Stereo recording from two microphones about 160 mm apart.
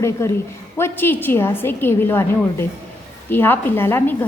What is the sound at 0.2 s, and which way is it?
A woman's voice, 15° left (ahead or behind).